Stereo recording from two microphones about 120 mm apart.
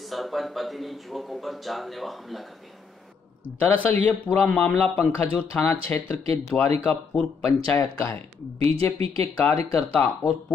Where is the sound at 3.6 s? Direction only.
15° left (ahead or behind).